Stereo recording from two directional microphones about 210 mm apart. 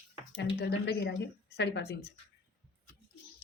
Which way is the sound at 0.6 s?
55° left (ahead or behind).